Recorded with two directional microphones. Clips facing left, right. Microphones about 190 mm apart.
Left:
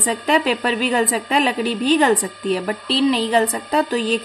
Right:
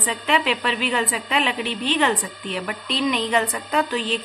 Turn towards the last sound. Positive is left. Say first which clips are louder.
# left 4 dB
turn(degrees=40)  # may be behind; listen again after turning